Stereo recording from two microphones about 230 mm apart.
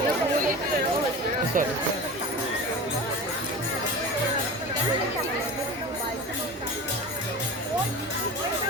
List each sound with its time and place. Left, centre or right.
1.5 s speech: right